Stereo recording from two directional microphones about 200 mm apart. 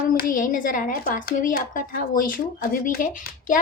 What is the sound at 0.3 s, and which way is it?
A woman's voice, 40° left (ahead or behind).